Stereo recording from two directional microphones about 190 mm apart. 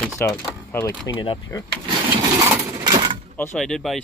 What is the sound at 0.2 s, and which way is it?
Speech, 10° left (ahead or behind).